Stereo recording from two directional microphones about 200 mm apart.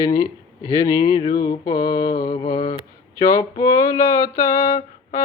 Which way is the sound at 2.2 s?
20° left (ahead or behind).